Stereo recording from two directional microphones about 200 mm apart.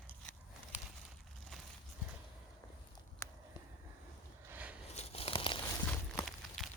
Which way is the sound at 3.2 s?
15° left (ahead or behind).